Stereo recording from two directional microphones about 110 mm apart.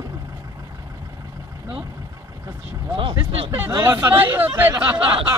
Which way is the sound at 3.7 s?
25° right (ahead or behind).